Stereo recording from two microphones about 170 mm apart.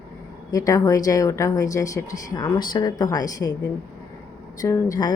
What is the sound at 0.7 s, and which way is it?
A woman's voice, 20° left (ahead or behind).